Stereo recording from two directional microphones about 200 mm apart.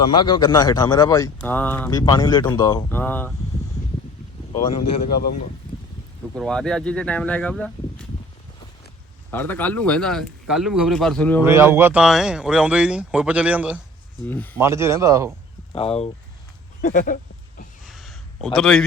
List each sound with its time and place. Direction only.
0.2 s speech: 20° left (ahead or behind)
1.9 s speech: 20° left (ahead or behind)
3.0 s speech: 10° left (ahead or behind)
6.3 s speech: 5° left (ahead or behind)
9.3 s speech: 10° left (ahead or behind)
11.4 s speech: 10° right (ahead or behind)
14.3 s speech: 10° left (ahead or behind)
14.6 s speech: 15° right (ahead or behind)
15.7 s speech: 30° left (ahead or behind)
16.8 s speech: 40° left (ahead or behind)
17.8 s a sound: centre (ahead or behind)